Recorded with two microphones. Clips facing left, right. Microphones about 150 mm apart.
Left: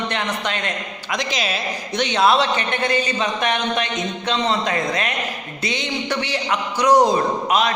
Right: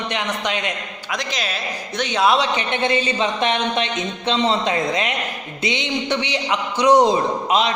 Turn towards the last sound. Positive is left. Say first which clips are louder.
# even
turn(degrees=-25)  # may be behind; listen again after turning